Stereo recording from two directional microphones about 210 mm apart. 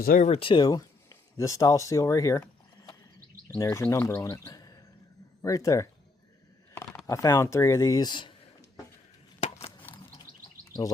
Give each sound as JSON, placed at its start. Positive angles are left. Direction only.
{"t": 0.0, "sound": "speech", "side_deg": 40}